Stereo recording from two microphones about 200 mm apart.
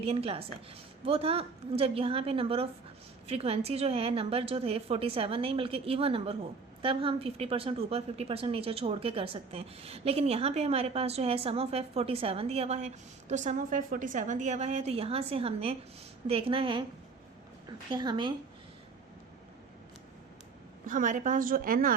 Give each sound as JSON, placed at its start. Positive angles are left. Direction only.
{"t": 0.0, "sound": "a woman's voice", "side_deg": -30}
{"t": 20.8, "sound": "a woman's voice", "side_deg": -40}